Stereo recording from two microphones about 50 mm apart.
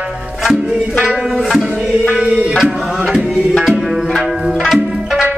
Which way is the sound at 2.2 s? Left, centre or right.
Right.